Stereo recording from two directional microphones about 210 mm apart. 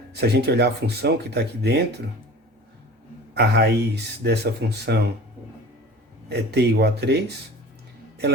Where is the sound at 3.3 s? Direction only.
50° right (ahead or behind).